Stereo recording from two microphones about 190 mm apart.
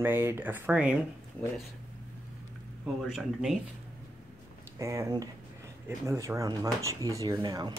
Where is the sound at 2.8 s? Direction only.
Centre (ahead or behind).